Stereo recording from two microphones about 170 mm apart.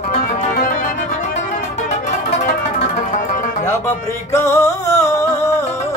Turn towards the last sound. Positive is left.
turn(degrees=15)  # may be behind; listen again after turning